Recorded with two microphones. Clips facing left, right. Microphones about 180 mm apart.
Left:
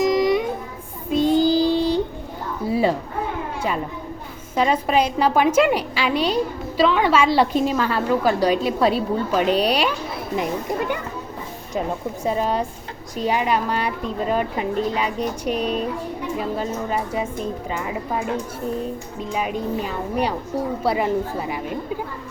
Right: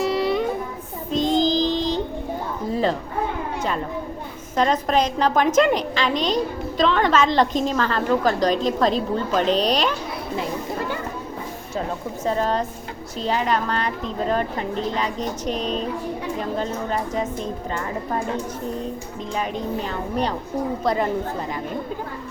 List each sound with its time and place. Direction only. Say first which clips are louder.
0.1 s child singing: left 2 dB; 10° left (ahead or behind)
2.6 s chatter: left 3 dB; 10° left (ahead or behind)
4.5 s a woman's voice: left 1 dB; 5° left (ahead or behind)
12.2 s a woman's voice: even; 10° left (ahead or behind)
19.3 s a woman's voice: left 2 dB; 10° left (ahead or behind)